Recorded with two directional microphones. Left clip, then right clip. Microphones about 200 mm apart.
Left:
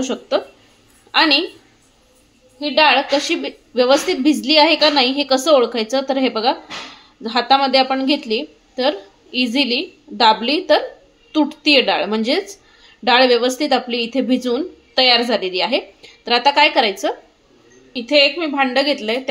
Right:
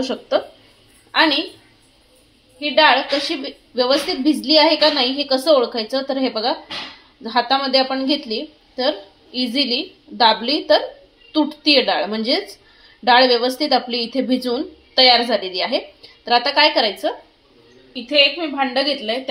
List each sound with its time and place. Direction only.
0.0 s a woman's voice: 20° left (ahead or behind)
2.6 s a woman's voice: 30° left (ahead or behind)
17.9 s a woman's voice: 45° left (ahead or behind)